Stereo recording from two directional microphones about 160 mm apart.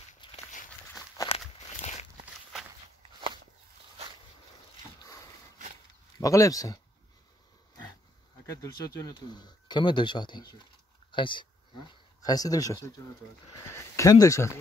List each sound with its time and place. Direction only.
0.2 s walk: 30° left (ahead or behind)
1.8 s a sound: 45° left (ahead or behind)
3.0 s walk: 30° right (ahead or behind)
6.1 s speech: 20° left (ahead or behind)
8.5 s speech: 20° left (ahead or behind)